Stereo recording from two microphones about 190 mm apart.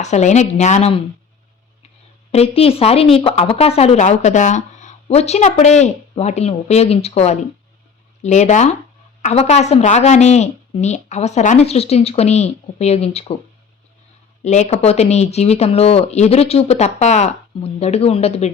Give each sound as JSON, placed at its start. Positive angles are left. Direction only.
{"t": 0.0, "sound": "speech", "side_deg": 35}
{"t": 2.6, "sound": "speech", "side_deg": 30}
{"t": 14.4, "sound": "speech", "side_deg": 35}